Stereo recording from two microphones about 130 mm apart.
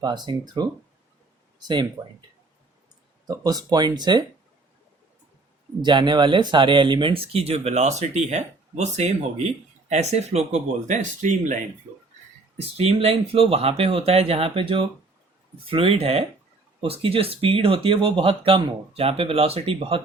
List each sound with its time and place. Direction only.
0.0 s speech: 35° right (ahead or behind)
3.2 s speech: 30° right (ahead or behind)
5.8 s speech: 35° right (ahead or behind); by 11.5 s 70° right (ahead or behind)
12.7 s speech: 50° right (ahead or behind)